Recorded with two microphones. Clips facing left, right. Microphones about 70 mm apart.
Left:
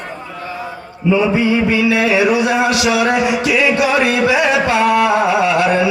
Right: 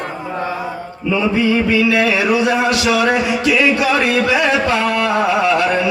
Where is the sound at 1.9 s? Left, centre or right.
Centre.